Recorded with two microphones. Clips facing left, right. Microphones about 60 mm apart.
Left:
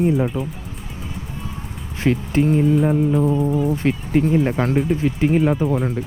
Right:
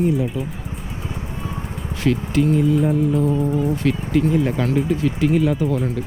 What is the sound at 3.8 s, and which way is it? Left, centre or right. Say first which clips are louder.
Speech: even; left.